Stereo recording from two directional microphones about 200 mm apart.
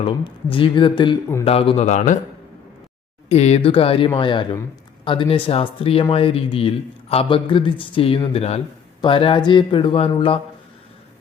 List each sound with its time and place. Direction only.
0.0 s a man's voice: 25° left (ahead or behind)
3.2 s speech: 35° left (ahead or behind)